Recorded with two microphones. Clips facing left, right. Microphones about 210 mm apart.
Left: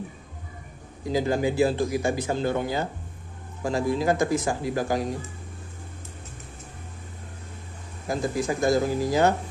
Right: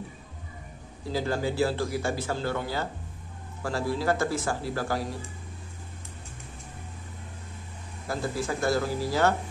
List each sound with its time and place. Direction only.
1.0 s speech: 15° left (ahead or behind)
8.1 s speech: 15° left (ahead or behind)